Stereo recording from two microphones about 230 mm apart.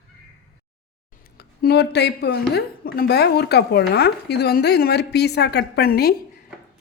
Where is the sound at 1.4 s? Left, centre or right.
Left.